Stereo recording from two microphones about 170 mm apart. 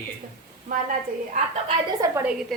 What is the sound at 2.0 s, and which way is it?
Speech, 20° right (ahead or behind).